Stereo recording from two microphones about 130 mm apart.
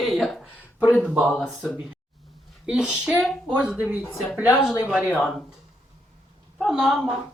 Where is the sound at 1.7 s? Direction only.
5° right (ahead or behind).